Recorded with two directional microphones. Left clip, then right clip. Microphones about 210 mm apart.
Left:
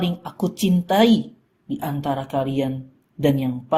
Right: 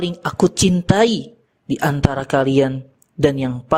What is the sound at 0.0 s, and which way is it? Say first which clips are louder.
Speech: right 8 dB; 50° right (ahead or behind).